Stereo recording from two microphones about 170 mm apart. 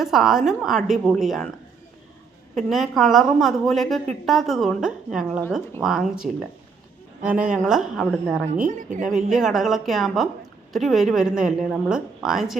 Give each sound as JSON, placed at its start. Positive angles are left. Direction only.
{"t": 0.0, "sound": "a woman's voice", "side_deg": 0}
{"t": 2.6, "sound": "a woman's voice", "side_deg": 0}
{"t": 7.3, "sound": "a woman's voice", "side_deg": -5}
{"t": 8.6, "sound": "a woman's voice", "side_deg": -50}
{"t": 9.0, "sound": "a woman's voice", "side_deg": -5}